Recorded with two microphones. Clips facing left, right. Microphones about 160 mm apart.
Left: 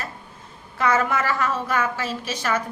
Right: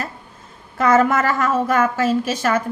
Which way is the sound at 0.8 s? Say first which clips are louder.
Right 6 dB; 45° right (ahead or behind).